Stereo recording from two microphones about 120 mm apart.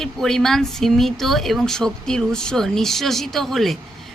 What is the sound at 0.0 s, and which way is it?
A woman's voice, 5° left (ahead or behind).